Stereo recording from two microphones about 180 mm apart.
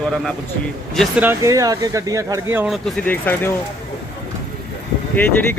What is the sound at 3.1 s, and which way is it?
Speech, 10° left (ahead or behind).